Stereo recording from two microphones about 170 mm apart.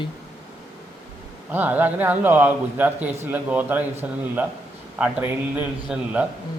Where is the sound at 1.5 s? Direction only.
10° right (ahead or behind).